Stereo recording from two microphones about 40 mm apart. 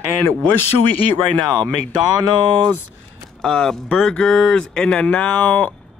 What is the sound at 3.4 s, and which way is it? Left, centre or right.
Speech, centre.